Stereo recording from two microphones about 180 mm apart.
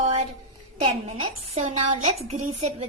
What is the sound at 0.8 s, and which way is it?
A woman's voice, 35° right (ahead or behind).